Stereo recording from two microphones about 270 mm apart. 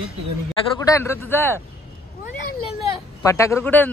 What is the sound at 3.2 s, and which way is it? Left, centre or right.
Speech, centre.